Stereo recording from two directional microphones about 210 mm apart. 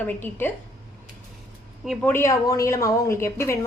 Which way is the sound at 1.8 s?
5° left (ahead or behind).